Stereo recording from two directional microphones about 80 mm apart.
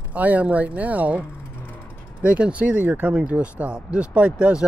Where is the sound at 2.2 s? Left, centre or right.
Centre.